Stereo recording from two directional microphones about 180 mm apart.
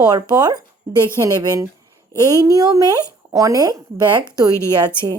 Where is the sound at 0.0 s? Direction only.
20° right (ahead or behind).